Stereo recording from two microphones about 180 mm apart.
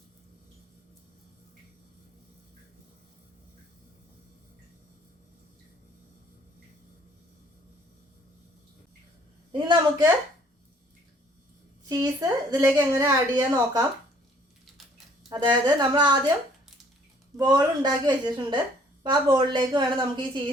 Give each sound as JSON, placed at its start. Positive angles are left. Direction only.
{"t": 9.5, "sound": "a woman's voice", "side_deg": -25}
{"t": 11.9, "sound": "a woman's voice", "side_deg": -20}
{"t": 15.3, "sound": "a woman's voice", "side_deg": -25}
{"t": 17.3, "sound": "a woman's voice", "side_deg": -20}